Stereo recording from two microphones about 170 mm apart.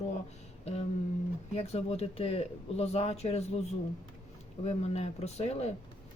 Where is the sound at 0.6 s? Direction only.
40° left (ahead or behind).